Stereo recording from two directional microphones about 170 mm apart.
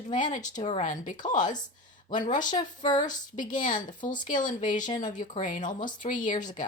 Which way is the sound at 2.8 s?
45° left (ahead or behind).